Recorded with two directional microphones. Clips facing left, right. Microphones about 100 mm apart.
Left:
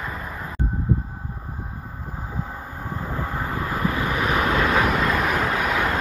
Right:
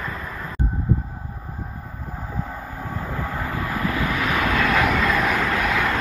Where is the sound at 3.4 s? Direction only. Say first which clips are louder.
Left 1 dB; 25° left (ahead or behind).